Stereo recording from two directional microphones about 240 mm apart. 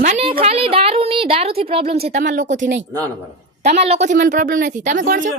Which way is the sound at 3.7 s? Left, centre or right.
Right.